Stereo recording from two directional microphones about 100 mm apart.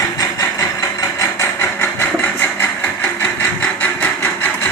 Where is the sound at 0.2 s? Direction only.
35° left (ahead or behind).